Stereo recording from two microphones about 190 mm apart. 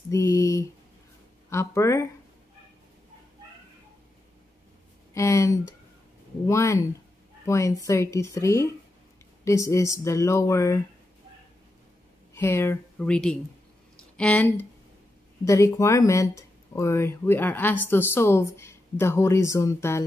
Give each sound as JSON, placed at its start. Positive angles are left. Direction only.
{"t": 0.1, "sound": "a sound", "side_deg": 15}
{"t": 1.5, "sound": "speech", "side_deg": 15}
{"t": 5.1, "sound": "speech", "side_deg": 15}
{"t": 12.4, "sound": "speech", "side_deg": 15}